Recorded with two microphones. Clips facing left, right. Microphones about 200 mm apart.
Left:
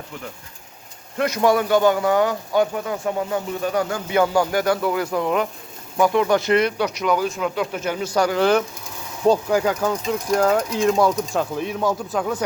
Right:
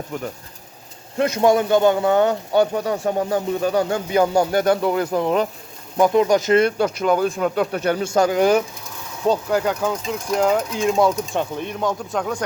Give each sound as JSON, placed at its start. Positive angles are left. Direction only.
{"t": 1.2, "sound": "speech", "side_deg": -25}
{"t": 6.0, "sound": "speech", "side_deg": -20}
{"t": 6.7, "sound": "speech", "side_deg": -45}
{"t": 7.9, "sound": "speech", "side_deg": -25}
{"t": 9.2, "sound": "speech", "side_deg": 10}